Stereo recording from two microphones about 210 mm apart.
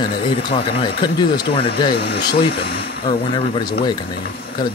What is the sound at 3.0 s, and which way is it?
Speech, 25° left (ahead or behind).